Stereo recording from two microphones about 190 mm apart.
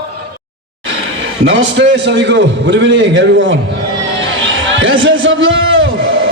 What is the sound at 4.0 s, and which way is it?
Music, 85° right.